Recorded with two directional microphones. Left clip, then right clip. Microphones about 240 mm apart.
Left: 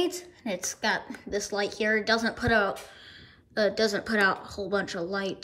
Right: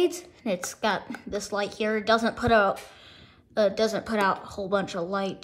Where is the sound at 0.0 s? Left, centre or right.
Centre.